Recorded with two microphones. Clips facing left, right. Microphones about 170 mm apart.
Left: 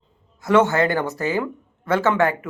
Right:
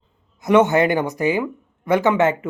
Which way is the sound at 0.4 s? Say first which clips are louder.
Right 2 dB; 20° right (ahead or behind).